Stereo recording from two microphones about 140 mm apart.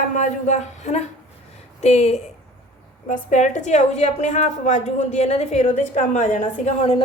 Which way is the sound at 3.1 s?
60° left (ahead or behind).